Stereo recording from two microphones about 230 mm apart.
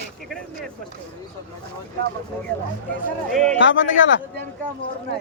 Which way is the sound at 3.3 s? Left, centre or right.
Centre.